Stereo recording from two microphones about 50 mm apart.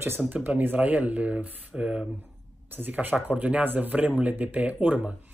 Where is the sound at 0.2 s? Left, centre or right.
Centre.